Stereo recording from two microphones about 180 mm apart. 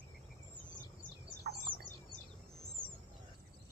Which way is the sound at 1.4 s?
60° right (ahead or behind).